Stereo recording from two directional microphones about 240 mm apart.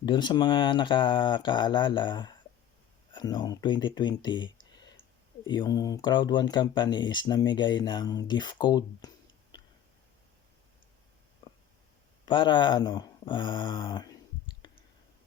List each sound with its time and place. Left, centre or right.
0.0 s speech: centre
12.2 s speech: centre
14.6 s clicking: centre